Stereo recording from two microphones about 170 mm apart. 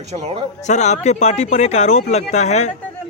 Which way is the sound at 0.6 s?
45° left (ahead or behind).